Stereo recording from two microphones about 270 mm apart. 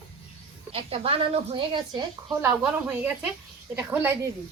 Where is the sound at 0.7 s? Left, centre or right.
Right.